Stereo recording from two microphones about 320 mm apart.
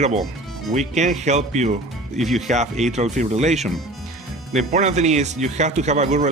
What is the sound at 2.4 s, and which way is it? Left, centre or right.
Speech, right.